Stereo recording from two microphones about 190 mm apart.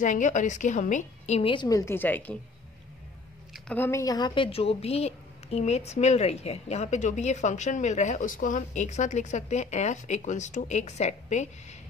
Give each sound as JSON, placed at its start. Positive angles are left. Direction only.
{"t": 0.0, "sound": "speech", "side_deg": 40}
{"t": 3.5, "sound": "speech", "side_deg": 5}